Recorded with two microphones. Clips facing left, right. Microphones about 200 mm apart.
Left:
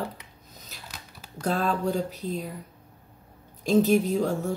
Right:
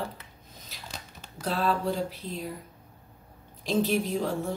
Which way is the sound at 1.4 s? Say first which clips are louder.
Left 2 dB; 45° left (ahead or behind).